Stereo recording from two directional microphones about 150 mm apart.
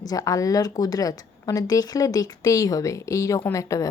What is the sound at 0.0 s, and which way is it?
A woman's voice, 25° left (ahead or behind).